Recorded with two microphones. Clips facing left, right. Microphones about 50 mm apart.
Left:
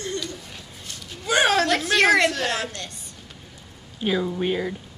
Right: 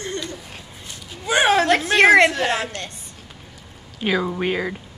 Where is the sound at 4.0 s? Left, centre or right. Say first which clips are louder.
Right 2 dB; right.